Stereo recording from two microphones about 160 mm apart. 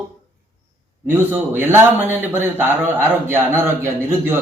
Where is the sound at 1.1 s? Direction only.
10° right (ahead or behind).